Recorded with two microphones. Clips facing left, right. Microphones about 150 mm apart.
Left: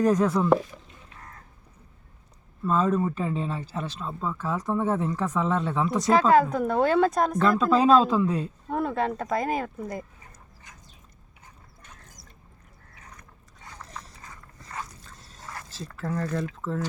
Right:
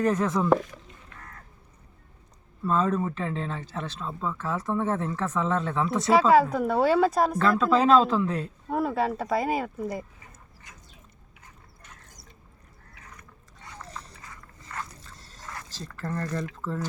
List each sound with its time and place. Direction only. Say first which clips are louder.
0.0 s speech: left 3 dB; 10° left (ahead or behind)
2.6 s speech: left 1 dB; 5° left (ahead or behind)
6.1 s speech: even; 5° right (ahead or behind)
8.0 s speech: left 2 dB; 10° left (ahead or behind)
8.7 s speech: right 1 dB; 5° right (ahead or behind)
14.7 s a sound: even; 35° left (ahead or behind)
15.8 s speech: left 2 dB; 5° left (ahead or behind)